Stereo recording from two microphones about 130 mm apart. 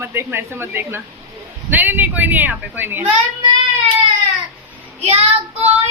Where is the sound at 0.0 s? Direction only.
20° right (ahead or behind).